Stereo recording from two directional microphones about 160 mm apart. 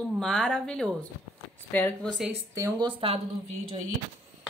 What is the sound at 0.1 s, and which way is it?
A woman's voice, 5° left (ahead or behind).